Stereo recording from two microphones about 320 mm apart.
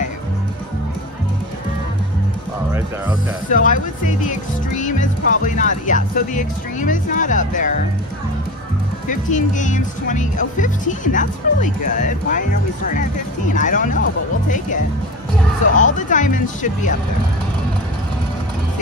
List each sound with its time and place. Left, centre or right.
3.5 s speech: left
9.1 s speech: left
15.7 s speech: left